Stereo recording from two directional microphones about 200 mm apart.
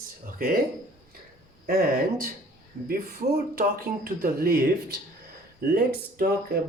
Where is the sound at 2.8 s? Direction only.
50° right (ahead or behind).